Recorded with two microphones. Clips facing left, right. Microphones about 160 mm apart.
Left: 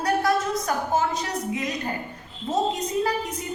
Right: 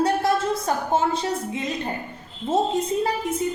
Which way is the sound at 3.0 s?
25° right (ahead or behind).